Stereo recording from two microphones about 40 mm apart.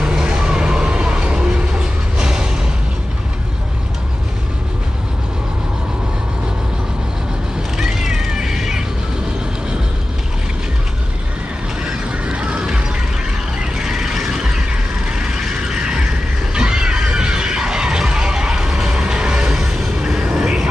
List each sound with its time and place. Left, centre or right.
0.0 s vehicle: centre
7.7 s cat: centre
11.8 s a sound: right
13.6 s vehicle: centre
15.0 s vehicle: centre
15.4 s mechanisms: centre
16.5 s a sound: right
19.5 s vehicle: centre